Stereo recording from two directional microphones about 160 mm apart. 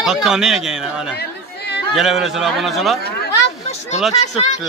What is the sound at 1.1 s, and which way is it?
Chatter, 90° left.